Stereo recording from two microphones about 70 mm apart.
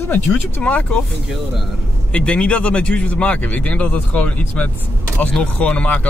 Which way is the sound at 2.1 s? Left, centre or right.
Centre.